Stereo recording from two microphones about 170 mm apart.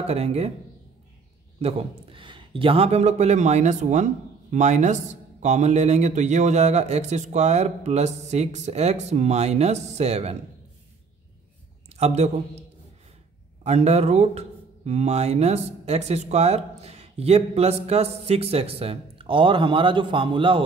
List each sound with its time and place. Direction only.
0.0 s speech: 40° right (ahead or behind)
1.6 s speech: 35° right (ahead or behind)
12.0 s speech: 40° right (ahead or behind)
13.7 s speech: 40° right (ahead or behind)